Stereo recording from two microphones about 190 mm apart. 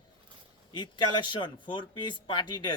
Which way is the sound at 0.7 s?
25° left (ahead or behind).